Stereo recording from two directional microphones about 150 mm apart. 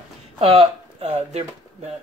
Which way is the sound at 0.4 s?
40° right (ahead or behind).